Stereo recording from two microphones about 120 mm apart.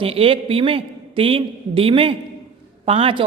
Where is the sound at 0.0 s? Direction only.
50° right (ahead or behind).